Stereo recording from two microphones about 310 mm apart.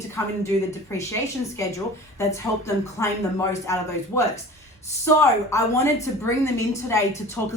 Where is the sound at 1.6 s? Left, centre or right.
Centre.